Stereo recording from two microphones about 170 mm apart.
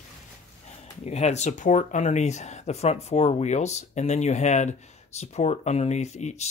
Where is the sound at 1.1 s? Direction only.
40° left (ahead or behind).